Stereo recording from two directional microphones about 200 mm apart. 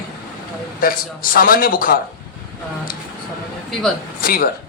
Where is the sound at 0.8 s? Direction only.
45° left (ahead or behind).